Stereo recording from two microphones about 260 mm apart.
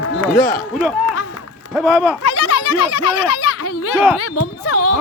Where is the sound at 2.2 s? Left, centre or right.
Left.